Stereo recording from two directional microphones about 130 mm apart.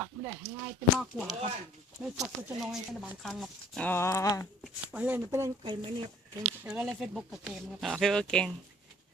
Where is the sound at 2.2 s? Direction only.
15° right (ahead or behind).